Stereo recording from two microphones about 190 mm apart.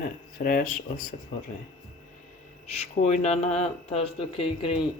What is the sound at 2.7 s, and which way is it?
Speech, 35° left (ahead or behind).